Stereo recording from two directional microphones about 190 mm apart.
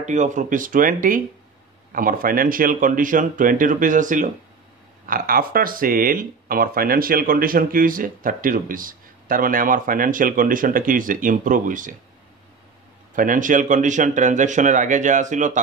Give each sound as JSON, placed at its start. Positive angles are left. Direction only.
{"t": 0.0, "sound": "speech", "side_deg": -40}
{"t": 13.1, "sound": "speech", "side_deg": -45}